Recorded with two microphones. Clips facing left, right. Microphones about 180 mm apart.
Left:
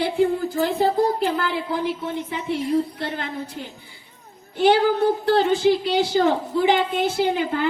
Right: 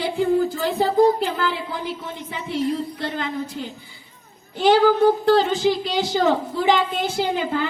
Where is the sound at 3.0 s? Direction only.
55° left (ahead or behind).